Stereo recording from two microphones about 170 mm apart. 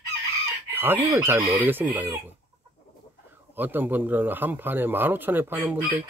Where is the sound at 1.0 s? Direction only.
15° right (ahead or behind).